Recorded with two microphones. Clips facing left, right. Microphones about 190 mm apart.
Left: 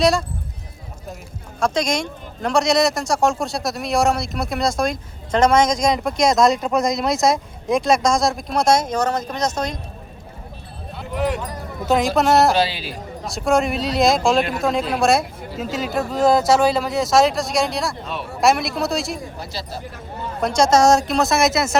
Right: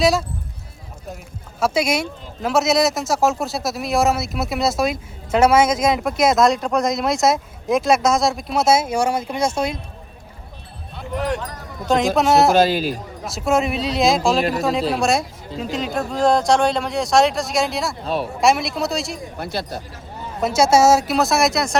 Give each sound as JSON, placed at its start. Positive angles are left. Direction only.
{"t": 0.0, "sound": "speech", "side_deg": 0}
{"t": 1.5, "sound": "speech", "side_deg": -5}
{"t": 10.9, "sound": "speech", "side_deg": 5}
{"t": 12.5, "sound": "speech", "side_deg": -45}
{"t": 13.2, "sound": "speech", "side_deg": 0}
{"t": 18.0, "sound": "speech", "side_deg": -35}
{"t": 18.3, "sound": "speech", "side_deg": 0}
{"t": 19.4, "sound": "speech", "side_deg": -55}
{"t": 20.4, "sound": "speech", "side_deg": -5}